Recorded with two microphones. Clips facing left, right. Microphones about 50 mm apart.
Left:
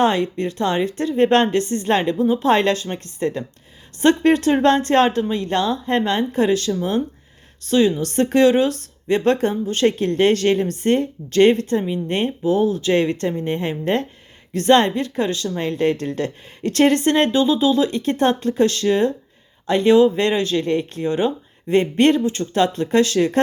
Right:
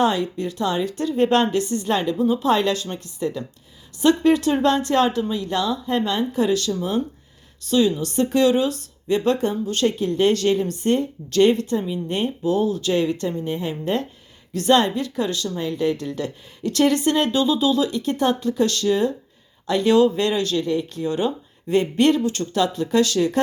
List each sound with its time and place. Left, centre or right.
0.0 s speech: left
10.0 s speech: left
12.4 s speech: left
15.5 s speech: left
20.7 s speech: left